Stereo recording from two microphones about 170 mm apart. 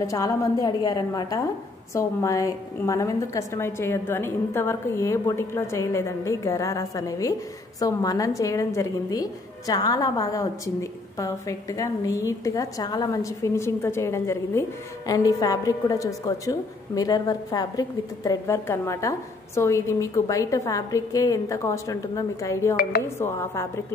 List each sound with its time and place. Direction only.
0.0 s a woman's voice: 20° left (ahead or behind)